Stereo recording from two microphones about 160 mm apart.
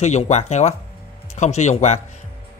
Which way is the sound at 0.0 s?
45° left (ahead or behind).